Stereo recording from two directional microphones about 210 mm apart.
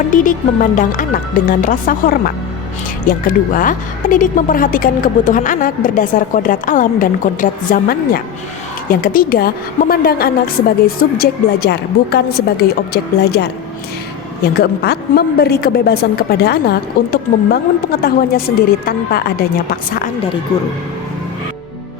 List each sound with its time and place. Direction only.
0.1 s a woman's voice: 40° left (ahead or behind)